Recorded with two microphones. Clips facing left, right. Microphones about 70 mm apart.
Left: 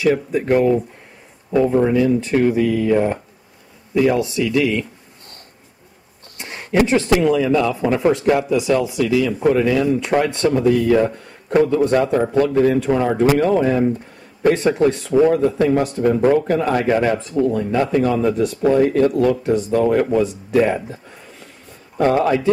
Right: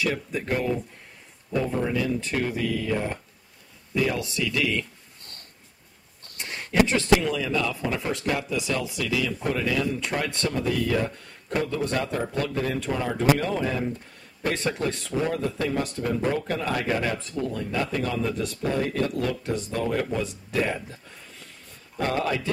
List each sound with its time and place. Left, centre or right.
0.0 s speech: centre
6.3 s a sound: centre
6.9 s speech: centre